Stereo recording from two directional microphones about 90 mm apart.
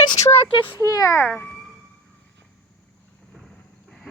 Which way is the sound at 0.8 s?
40° left (ahead or behind).